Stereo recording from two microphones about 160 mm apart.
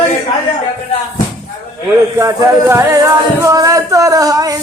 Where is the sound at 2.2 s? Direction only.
20° right (ahead or behind).